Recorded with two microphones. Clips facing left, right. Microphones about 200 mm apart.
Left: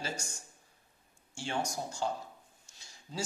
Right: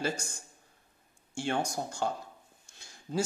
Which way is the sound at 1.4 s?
55° right (ahead or behind).